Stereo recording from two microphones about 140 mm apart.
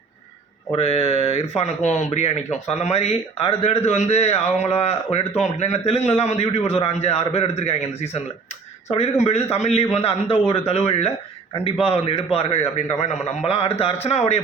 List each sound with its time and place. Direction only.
0.8 s speech: 45° left (ahead or behind)
9.2 s speech: 50° left (ahead or behind)